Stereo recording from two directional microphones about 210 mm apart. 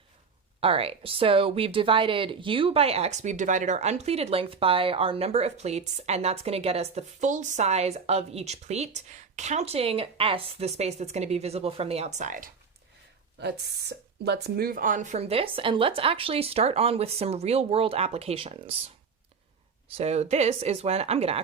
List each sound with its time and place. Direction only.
0.6 s speech: 25° right (ahead or behind)
13.4 s speech: 50° right (ahead or behind); by 18.7 s 25° right (ahead or behind)
20.0 s speech: 30° right (ahead or behind)